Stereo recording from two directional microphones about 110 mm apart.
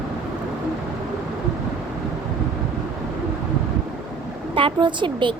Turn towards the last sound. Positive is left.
turn(degrees=-45)  # may be behind; listen again after turning